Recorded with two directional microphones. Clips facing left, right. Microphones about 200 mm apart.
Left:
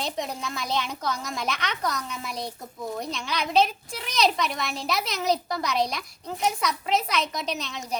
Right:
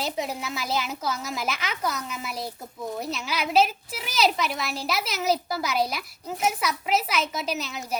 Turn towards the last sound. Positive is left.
turn(degrees=-5)  # may be behind; listen again after turning